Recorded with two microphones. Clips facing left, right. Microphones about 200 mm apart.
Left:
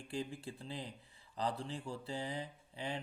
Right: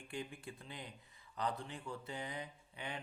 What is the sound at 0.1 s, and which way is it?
Speech, 30° left (ahead or behind).